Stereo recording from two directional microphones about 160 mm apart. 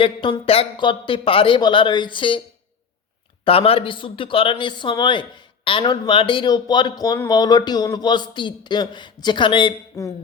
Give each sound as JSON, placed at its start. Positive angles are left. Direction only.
{"t": 0.0, "sound": "a man's voice", "side_deg": 30}
{"t": 3.4, "sound": "a man's voice", "side_deg": 35}